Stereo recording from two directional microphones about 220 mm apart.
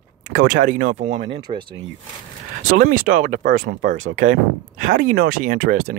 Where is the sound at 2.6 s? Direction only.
40° right (ahead or behind).